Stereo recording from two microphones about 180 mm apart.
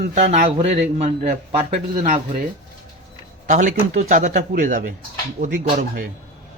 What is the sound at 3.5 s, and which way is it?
Speech, 45° right (ahead or behind).